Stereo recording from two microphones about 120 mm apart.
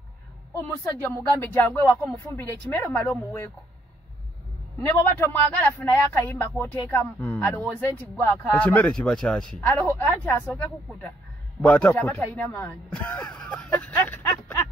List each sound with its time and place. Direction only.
0.5 s a man's voice: 20° left (ahead or behind)
4.8 s a man's voice: 15° left (ahead or behind)
9.7 s a man's voice: 15° left (ahead or behind)